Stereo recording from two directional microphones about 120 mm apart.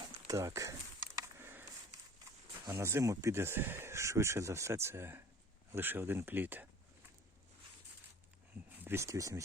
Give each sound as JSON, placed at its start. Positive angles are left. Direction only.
{"t": 0.3, "sound": "speech", "side_deg": -25}
{"t": 1.0, "sound": "a sound", "side_deg": -20}
{"t": 2.6, "sound": "speech", "side_deg": -20}
{"t": 8.8, "sound": "speech", "side_deg": -20}